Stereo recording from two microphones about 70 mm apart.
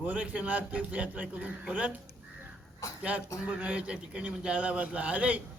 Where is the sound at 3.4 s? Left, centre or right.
Centre.